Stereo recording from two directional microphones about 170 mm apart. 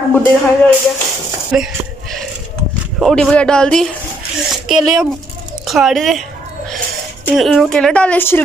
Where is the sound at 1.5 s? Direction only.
5° right (ahead or behind).